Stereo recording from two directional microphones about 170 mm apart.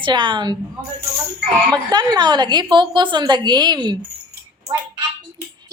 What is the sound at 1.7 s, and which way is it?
A woman's voice, 25° right (ahead or behind).